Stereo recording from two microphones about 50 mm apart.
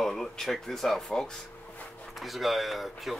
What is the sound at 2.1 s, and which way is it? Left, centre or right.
Speech, centre.